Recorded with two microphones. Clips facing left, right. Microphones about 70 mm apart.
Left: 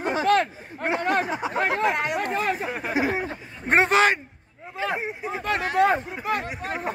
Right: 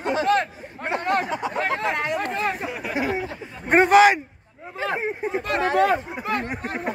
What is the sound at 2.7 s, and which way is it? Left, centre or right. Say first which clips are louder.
Speech: left 1 dB; left.